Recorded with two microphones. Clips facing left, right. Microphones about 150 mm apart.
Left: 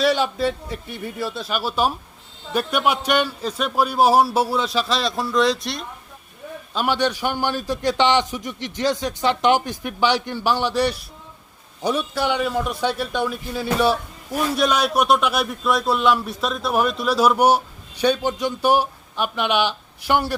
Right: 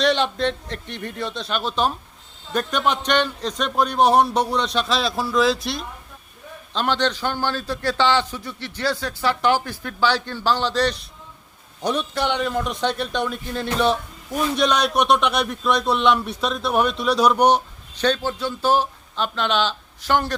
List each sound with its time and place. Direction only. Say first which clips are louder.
0.0 s a man's voice: left 1 dB; 5° left (ahead or behind)
6.7 s a man's voice: left 1 dB; 10° left (ahead or behind)